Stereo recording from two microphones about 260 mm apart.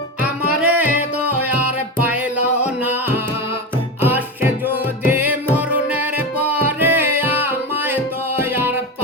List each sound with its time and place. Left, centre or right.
0.2 s music: centre